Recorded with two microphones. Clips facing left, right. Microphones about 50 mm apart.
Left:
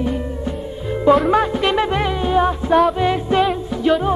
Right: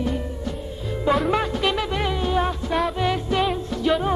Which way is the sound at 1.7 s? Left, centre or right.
Centre.